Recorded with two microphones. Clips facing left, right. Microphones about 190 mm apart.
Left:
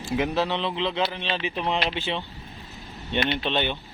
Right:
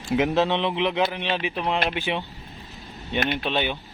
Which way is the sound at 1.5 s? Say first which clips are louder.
Right 1 dB; centre (ahead or behind).